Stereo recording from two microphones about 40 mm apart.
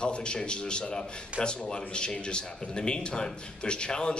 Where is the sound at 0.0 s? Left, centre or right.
Left.